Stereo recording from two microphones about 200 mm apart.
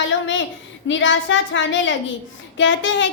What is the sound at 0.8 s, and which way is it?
Child singing, 70° left (ahead or behind).